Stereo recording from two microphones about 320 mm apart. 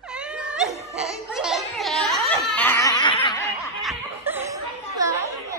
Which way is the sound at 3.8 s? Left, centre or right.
Centre.